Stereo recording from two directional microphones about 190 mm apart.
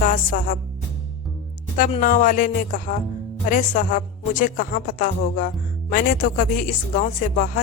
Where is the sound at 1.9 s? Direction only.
45° left (ahead or behind).